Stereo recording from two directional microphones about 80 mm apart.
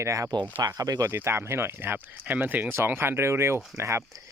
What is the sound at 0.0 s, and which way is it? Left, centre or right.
Speech, right.